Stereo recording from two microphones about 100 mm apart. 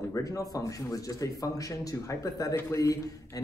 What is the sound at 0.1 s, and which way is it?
A man's voice, 35° left (ahead or behind).